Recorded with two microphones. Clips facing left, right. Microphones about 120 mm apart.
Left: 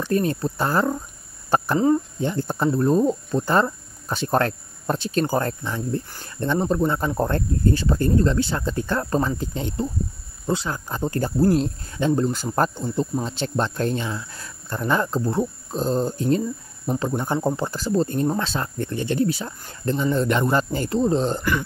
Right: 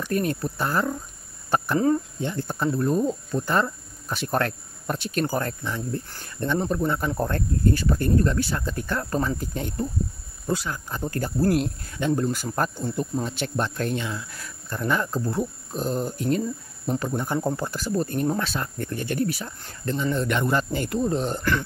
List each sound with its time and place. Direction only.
0.0 s speech: 30° left (ahead or behind)
2.2 s speech: 30° left (ahead or behind)